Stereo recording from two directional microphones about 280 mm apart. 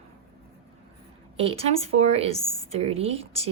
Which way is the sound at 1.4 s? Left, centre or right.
Right.